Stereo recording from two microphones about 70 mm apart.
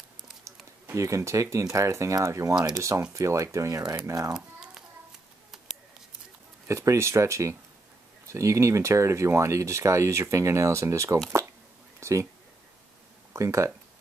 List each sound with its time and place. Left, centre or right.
0.9 s speech: right
2.5 s speech: centre
2.8 s speech: right
4.3 s a sound: centre
6.7 s speech: right
12.0 s a sound: right
13.3 s speech: right